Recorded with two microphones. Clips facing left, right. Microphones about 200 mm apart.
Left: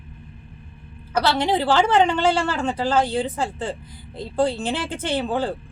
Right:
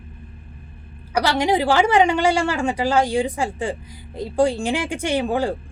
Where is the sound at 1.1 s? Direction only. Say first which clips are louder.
Right 2 dB; 10° right (ahead or behind).